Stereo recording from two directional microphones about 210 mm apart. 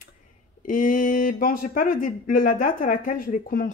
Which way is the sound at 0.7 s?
40° left (ahead or behind).